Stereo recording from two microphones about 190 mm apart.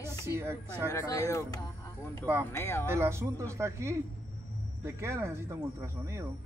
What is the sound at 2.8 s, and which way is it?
Speech, 15° right (ahead or behind).